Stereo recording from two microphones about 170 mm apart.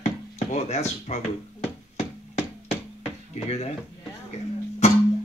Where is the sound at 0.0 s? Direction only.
40° left (ahead or behind).